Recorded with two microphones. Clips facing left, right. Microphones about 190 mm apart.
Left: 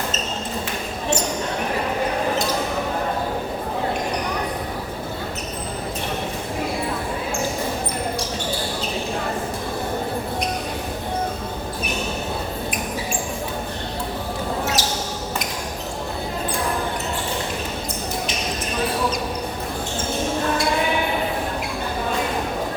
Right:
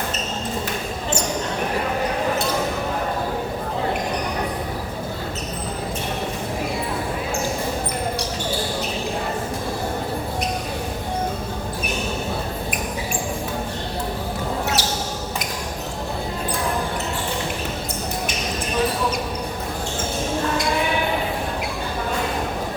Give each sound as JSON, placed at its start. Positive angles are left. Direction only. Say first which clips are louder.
{"t": 14.8, "sound": "basketball bounce", "louder": "even", "side_deg": -60}